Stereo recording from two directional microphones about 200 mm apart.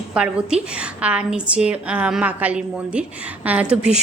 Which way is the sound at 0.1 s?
5° right (ahead or behind).